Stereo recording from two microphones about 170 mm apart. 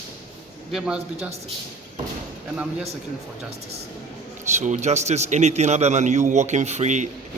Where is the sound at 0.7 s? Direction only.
Centre (ahead or behind).